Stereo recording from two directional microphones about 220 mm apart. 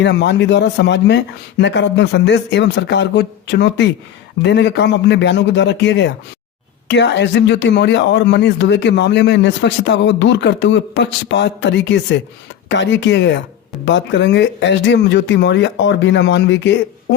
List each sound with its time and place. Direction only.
0.0 s speech: 50° left (ahead or behind)